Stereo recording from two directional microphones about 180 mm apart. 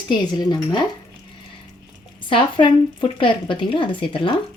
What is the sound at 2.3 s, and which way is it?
A woman's voice, 30° left (ahead or behind).